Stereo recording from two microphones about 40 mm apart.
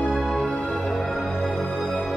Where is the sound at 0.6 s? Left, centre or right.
Left.